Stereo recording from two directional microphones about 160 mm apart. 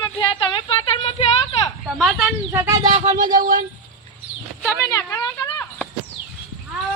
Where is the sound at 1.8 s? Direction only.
Centre (ahead or behind).